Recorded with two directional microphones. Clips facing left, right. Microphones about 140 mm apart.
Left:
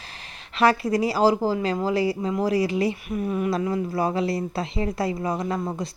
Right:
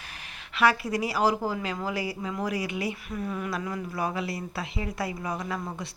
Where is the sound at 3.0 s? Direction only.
20° left (ahead or behind).